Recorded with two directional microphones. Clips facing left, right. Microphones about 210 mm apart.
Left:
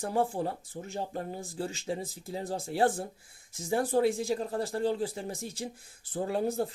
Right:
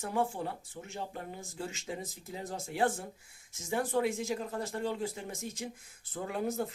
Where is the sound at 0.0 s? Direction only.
35° left (ahead or behind).